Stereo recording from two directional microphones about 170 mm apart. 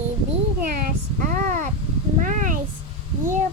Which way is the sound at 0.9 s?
45° right (ahead or behind).